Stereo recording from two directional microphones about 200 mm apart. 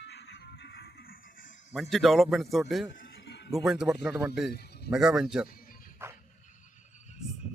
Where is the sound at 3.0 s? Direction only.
60° left (ahead or behind).